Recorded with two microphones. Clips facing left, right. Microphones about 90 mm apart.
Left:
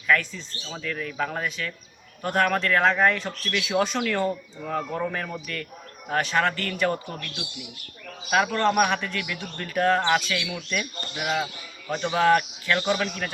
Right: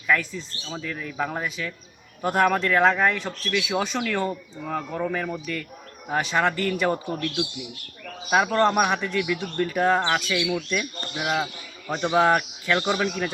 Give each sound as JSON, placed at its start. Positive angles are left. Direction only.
{"t": 0.1, "sound": "speech", "side_deg": -5}
{"t": 8.6, "sound": "speech", "side_deg": -10}
{"t": 10.0, "sound": "speech", "side_deg": 0}
{"t": 11.9, "sound": "speech", "side_deg": -20}